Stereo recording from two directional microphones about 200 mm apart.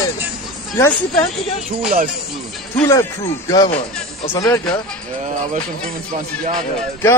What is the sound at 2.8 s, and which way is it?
Speech, 15° left (ahead or behind).